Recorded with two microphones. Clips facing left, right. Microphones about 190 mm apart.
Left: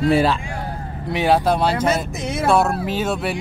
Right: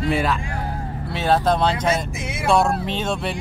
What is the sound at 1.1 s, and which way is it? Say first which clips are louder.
Speech: left 2 dB; 15° left (ahead or behind).